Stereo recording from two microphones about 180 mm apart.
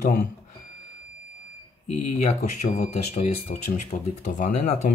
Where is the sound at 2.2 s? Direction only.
40° left (ahead or behind).